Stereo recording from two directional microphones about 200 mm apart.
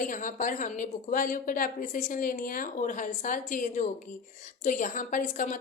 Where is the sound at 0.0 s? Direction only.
40° left (ahead or behind).